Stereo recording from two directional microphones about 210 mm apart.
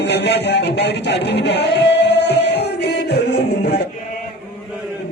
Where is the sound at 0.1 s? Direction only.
55° left (ahead or behind).